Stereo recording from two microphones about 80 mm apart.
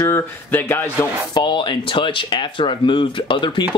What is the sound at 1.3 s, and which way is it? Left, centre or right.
Speech, left.